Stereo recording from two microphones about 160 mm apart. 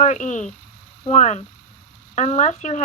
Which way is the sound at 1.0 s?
45° left (ahead or behind).